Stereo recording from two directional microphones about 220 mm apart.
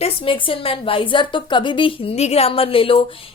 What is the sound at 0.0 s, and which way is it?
A woman's voice, 25° left (ahead or behind).